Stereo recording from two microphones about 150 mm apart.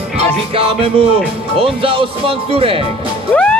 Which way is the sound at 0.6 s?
40° right (ahead or behind).